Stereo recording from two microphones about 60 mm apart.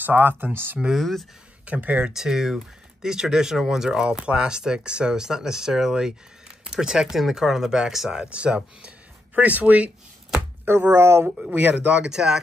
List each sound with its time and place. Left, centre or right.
0.0 s speech: right
0.9 s speech: centre
1.7 s speech: right
2.1 s speech: centre; by 9.8 s right
10.6 s speech: right
11.2 s speech: centre